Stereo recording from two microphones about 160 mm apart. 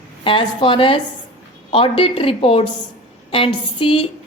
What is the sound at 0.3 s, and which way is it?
A woman's voice, 35° left (ahead or behind).